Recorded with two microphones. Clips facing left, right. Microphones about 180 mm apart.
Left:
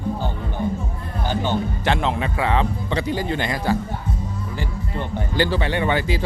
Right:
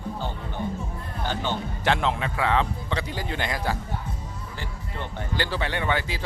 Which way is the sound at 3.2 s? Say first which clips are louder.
Left 6 dB; 5° right (ahead or behind).